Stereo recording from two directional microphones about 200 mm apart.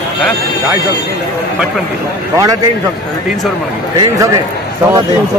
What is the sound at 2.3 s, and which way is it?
Speech, 15° right (ahead or behind).